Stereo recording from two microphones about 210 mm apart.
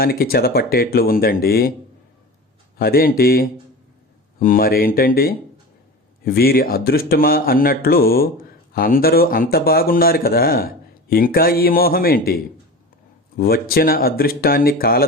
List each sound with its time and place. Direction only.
0.0 s speech: 45° left (ahead or behind)
2.7 s speech: 45° left (ahead or behind)
13.4 s speech: 45° left (ahead or behind)